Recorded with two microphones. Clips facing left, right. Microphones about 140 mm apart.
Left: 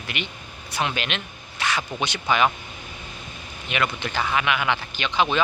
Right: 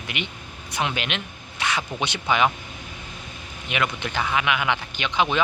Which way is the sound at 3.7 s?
15° right (ahead or behind).